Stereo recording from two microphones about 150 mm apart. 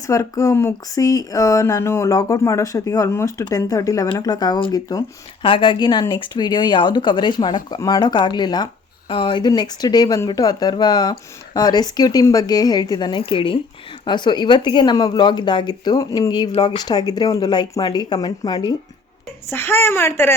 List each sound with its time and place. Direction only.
0.1 s speech: 20° left (ahead or behind)
19.5 s a woman's voice: 15° left (ahead or behind)